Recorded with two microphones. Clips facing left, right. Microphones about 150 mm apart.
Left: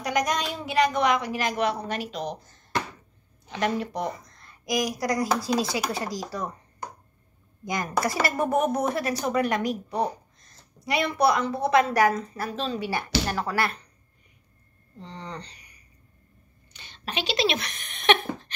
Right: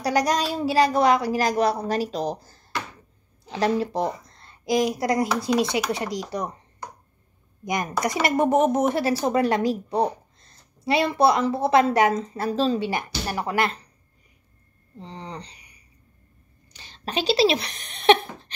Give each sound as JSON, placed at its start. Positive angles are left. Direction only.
{"t": 0.0, "sound": "a woman's voice", "side_deg": -35}
{"t": 7.6, "sound": "a woman's voice", "side_deg": -20}
{"t": 15.0, "sound": "speech", "side_deg": -30}
{"t": 16.7, "sound": "speech", "side_deg": -35}